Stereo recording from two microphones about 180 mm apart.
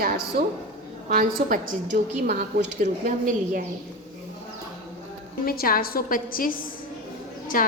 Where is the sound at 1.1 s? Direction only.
50° right (ahead or behind).